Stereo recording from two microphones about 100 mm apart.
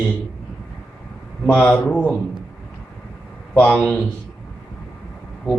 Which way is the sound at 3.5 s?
10° left (ahead or behind).